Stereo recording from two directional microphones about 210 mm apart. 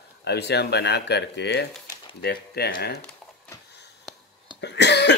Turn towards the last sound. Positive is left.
turn(degrees=55)  # may be behind; listen again after turning